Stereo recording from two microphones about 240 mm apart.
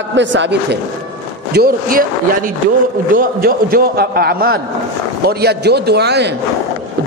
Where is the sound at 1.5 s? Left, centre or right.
Right.